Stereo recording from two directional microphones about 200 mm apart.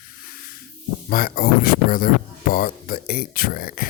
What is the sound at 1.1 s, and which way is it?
Speech, 45° left (ahead or behind).